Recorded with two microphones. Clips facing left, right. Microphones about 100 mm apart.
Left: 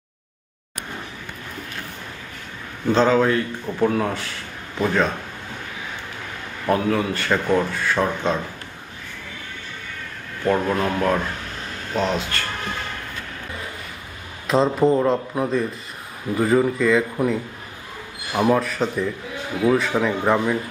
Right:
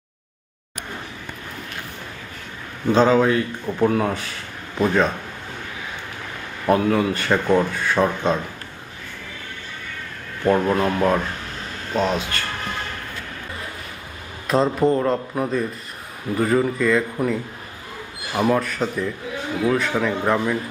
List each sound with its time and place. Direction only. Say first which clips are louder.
2.8 s speech: right 1 dB; 10° right (ahead or behind)
6.7 s speech: right 2 dB; 15° right (ahead or behind)
10.4 s speech: right 2 dB; 10° right (ahead or behind)
11.9 s speech: right 1 dB; 10° right (ahead or behind)
14.4 s a man's voice: left 1 dB; centre (ahead or behind)